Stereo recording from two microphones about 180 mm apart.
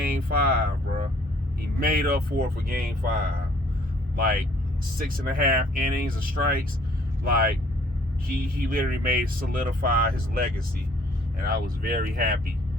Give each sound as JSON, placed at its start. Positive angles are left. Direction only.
{"t": 0.0, "sound": "speech", "side_deg": -55}
{"t": 4.2, "sound": "speech", "side_deg": -50}
{"t": 8.3, "sound": "speech", "side_deg": -50}